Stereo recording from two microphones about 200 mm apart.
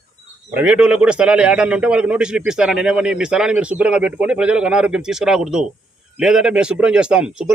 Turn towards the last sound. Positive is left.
turn(degrees=-5)  # may be behind; listen again after turning